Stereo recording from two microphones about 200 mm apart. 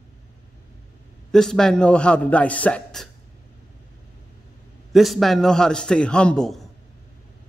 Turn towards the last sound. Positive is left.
turn(degrees=0)  # may be behind; listen again after turning